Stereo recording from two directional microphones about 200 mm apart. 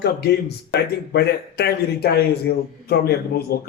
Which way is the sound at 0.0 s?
55° left (ahead or behind).